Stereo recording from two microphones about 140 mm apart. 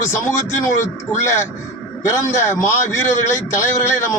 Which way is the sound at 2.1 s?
20° left (ahead or behind).